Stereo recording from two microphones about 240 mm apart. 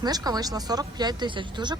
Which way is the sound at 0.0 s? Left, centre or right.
Centre.